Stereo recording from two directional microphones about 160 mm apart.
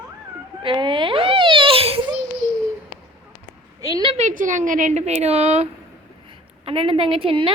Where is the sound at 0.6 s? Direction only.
30° right (ahead or behind).